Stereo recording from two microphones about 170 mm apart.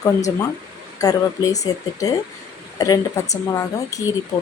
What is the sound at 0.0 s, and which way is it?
Speech, 20° left (ahead or behind).